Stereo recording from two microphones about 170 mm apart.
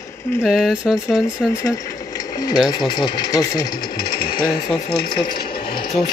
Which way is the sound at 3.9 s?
65° left (ahead or behind).